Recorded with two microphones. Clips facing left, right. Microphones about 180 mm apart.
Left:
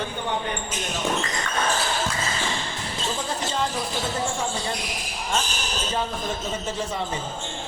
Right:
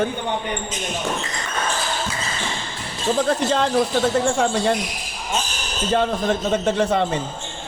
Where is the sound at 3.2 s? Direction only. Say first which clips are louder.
Right 9 dB; 65° right (ahead or behind).